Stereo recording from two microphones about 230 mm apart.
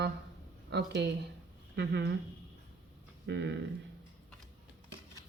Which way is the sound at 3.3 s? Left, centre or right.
Right.